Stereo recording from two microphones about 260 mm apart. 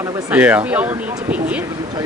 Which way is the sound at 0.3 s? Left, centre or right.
Centre.